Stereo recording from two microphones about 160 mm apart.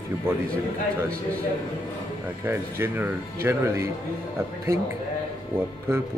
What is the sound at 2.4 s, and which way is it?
Speech, 15° right (ahead or behind).